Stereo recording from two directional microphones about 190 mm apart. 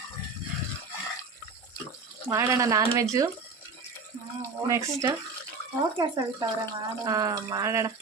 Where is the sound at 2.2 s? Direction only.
15° right (ahead or behind).